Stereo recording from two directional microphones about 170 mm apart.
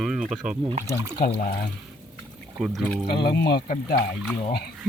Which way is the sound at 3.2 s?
70° left (ahead or behind).